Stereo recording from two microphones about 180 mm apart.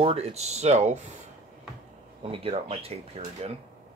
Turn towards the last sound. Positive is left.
turn(degrees=-35)  # may be behind; listen again after turning